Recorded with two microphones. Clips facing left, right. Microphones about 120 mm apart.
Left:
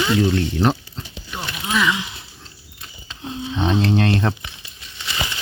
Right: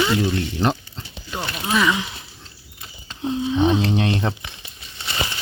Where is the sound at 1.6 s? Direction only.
25° right (ahead or behind).